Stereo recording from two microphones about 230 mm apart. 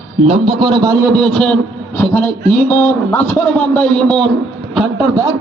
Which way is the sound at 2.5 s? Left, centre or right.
Left.